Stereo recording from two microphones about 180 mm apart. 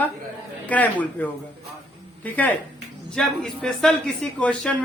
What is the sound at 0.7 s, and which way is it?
A man's voice, 10° left (ahead or behind).